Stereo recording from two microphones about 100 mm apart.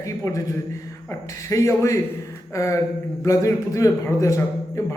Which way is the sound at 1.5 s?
30° left (ahead or behind).